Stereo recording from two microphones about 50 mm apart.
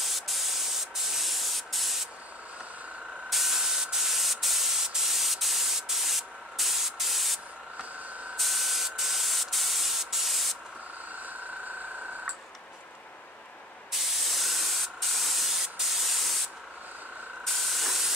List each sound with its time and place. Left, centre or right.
0.0 s spray: centre
3.3 s spray: centre
8.4 s spray: centre
11.2 s vehicle: right
13.9 s spray: centre
17.5 s steam: centre